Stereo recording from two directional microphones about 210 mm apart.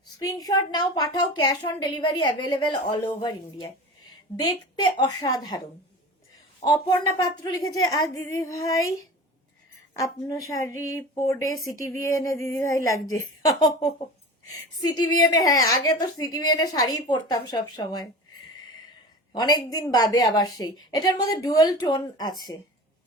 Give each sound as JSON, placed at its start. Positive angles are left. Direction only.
{"t": 0.2, "sound": "a woman's voice", "side_deg": 15}
{"t": 7.4, "sound": "a woman's voice", "side_deg": 20}
{"t": 9.9, "sound": "a woman's voice", "side_deg": 15}
{"t": 14.8, "sound": "speech", "side_deg": 20}
{"t": 19.3, "sound": "a woman's voice", "side_deg": 20}